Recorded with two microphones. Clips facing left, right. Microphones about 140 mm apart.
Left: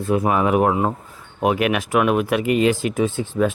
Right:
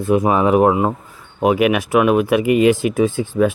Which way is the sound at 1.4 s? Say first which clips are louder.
Right 4 dB; 5° right (ahead or behind).